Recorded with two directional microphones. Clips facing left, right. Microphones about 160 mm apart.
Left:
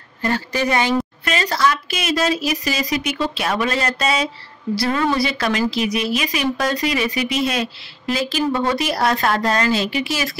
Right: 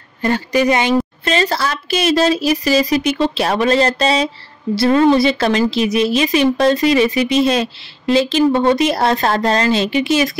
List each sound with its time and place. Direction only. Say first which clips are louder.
0.2 s a woman's voice: right 5 dB; 20° right (ahead or behind)